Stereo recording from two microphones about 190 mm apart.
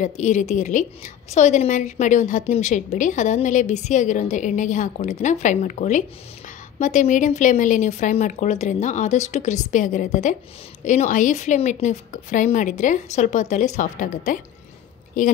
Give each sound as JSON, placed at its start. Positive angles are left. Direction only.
{"t": 0.0, "sound": "a woman's voice", "side_deg": 40}